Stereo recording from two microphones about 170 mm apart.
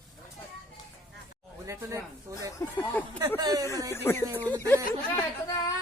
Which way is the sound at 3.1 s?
15° right (ahead or behind).